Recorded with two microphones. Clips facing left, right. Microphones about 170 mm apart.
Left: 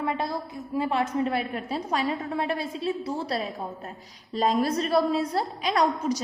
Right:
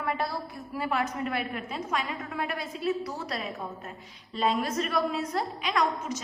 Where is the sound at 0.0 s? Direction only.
20° left (ahead or behind).